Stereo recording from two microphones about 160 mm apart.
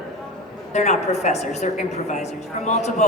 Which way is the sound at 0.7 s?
45° left (ahead or behind).